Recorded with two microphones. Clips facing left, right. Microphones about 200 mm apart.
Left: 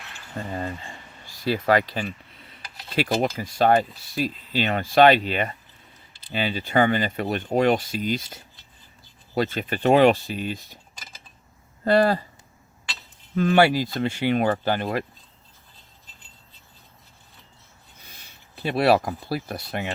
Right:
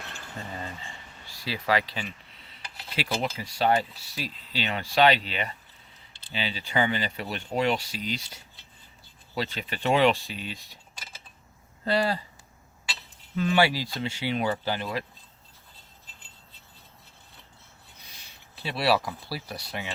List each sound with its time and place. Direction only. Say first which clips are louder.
0.4 s speech: left 8 dB; 45° left (ahead or behind)
11.9 s speech: left 7 dB; 50° left (ahead or behind)
13.3 s speech: left 5 dB; 50° left (ahead or behind)
18.0 s speech: left 4 dB; 50° left (ahead or behind)